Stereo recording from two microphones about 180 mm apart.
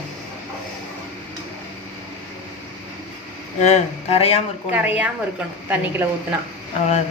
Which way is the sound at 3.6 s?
35° left (ahead or behind).